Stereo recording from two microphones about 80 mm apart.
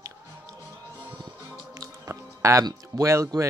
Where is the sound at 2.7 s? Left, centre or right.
Right.